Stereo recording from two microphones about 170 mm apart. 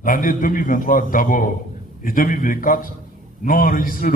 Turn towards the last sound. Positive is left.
turn(degrees=55)  # may be behind; listen again after turning